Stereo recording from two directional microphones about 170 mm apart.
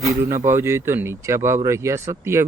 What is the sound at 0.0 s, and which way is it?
Speech, 15° right (ahead or behind).